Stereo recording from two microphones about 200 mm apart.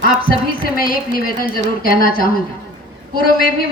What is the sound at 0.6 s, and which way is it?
A woman's voice, 45° left (ahead or behind).